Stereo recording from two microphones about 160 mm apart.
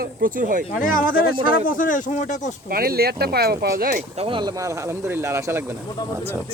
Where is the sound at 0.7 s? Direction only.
55° left (ahead or behind).